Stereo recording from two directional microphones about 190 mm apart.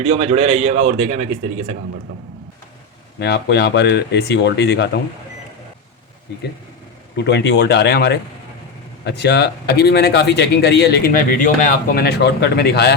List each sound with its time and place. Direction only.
0.0 s a man's voice: 30° right (ahead or behind)
3.2 s speech: 60° left (ahead or behind)
7.3 s speech: 60° left (ahead or behind)